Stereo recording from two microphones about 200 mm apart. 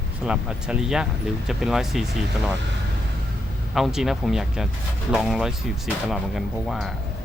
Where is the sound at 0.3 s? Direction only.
5° right (ahead or behind).